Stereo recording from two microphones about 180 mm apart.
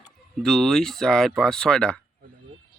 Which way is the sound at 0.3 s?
Centre (ahead or behind).